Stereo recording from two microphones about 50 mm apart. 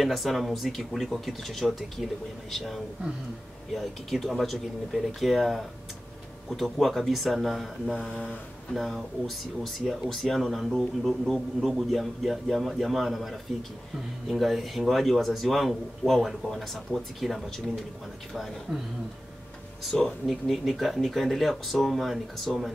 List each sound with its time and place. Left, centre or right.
0.0 s a man's voice: centre
8.1 s mantra: left
8.7 s a man's voice: centre
20.2 s a man's voice: centre